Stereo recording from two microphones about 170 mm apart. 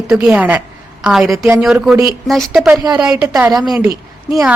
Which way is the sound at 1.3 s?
15° right (ahead or behind).